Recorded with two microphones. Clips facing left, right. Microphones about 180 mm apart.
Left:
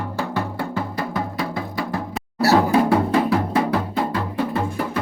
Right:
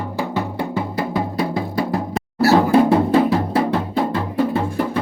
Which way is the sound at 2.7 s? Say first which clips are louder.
Right 4 dB; 25° right (ahead or behind).